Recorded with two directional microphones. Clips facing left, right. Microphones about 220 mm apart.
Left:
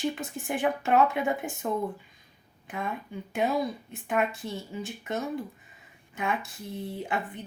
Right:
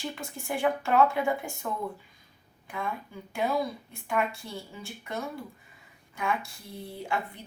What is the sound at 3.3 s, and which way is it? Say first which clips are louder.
Speech: left 1 dB; 20° left (ahead or behind).